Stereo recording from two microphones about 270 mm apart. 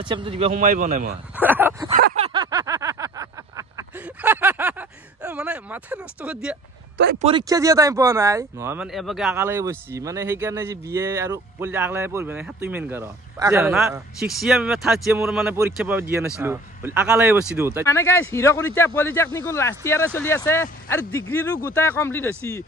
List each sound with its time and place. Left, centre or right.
0.0 s a man's voice: centre
1.3 s bow-wow: centre
1.9 s vehicle: right; by 6.5 s centre
7.2 s speech: centre
17.8 s speech: centre